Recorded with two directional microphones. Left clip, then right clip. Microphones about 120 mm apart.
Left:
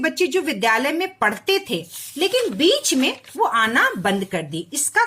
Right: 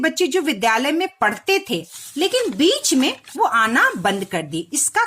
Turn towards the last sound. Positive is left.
turn(degrees=-40)  # may be behind; listen again after turning